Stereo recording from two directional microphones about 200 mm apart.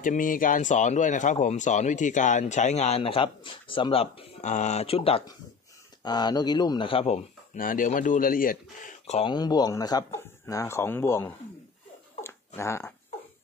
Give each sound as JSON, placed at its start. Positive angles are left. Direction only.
{"t": 0.0, "sound": "a man's voice", "side_deg": 40}
{"t": 7.5, "sound": "speech", "side_deg": 45}
{"t": 9.3, "sound": "speech", "side_deg": 20}
{"t": 12.2, "sound": "a sound", "side_deg": 10}